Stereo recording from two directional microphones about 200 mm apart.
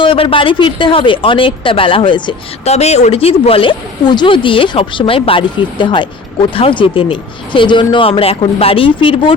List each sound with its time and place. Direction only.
0.0 s speech: 25° left (ahead or behind)